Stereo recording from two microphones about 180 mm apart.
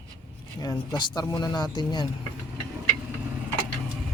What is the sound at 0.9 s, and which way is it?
Speech, 25° left (ahead or behind).